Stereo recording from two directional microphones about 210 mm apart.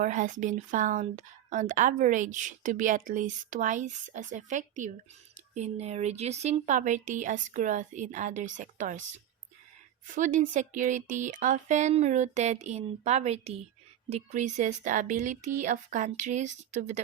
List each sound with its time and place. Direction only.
0.0 s speech: 35° right (ahead or behind)
10.2 s speech: 35° right (ahead or behind)